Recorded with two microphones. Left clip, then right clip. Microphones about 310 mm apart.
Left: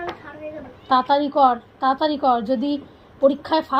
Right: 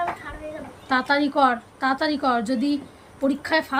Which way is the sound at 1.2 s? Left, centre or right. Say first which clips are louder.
Left 3 dB; centre.